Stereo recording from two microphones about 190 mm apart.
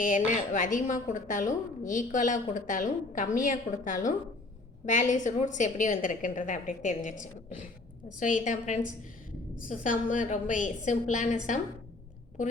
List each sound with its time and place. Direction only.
0.0 s a woman's voice: 40° left (ahead or behind)